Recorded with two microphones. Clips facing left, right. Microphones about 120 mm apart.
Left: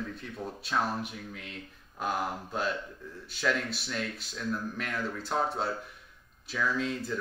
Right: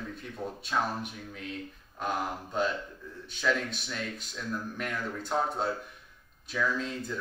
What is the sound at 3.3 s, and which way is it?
A man's voice, 5° left (ahead or behind).